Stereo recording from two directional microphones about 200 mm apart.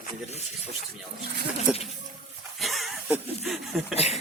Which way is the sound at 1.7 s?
5° right (ahead or behind).